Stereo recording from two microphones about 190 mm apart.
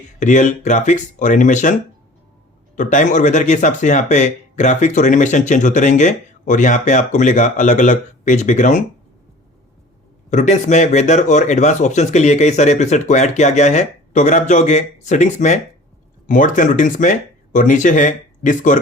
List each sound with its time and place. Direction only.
0.2 s speech: 40° left (ahead or behind)
2.7 s speech: 40° left (ahead or behind)
10.2 s speech: 35° left (ahead or behind)